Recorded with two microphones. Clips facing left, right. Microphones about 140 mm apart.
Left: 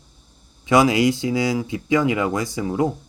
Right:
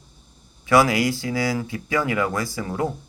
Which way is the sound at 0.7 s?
20° left (ahead or behind).